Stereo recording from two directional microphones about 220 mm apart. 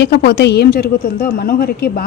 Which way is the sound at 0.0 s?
50° left (ahead or behind).